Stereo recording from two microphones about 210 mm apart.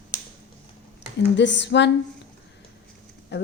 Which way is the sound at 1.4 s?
55° left (ahead or behind).